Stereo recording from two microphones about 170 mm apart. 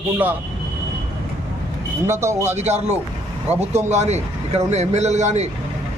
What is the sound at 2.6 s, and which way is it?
Speech, 40° right (ahead or behind).